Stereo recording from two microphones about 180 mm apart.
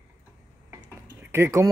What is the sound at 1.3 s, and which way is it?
Speech, 15° right (ahead or behind).